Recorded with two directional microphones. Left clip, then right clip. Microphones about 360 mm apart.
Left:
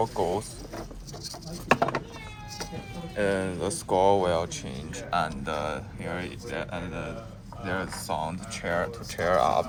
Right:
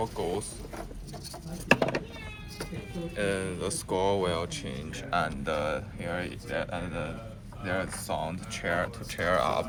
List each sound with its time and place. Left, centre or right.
0.0 s speech: left
3.2 s speech: left